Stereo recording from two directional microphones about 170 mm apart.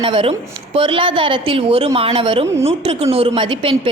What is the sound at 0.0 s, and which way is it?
A woman's voice, 30° right (ahead or behind).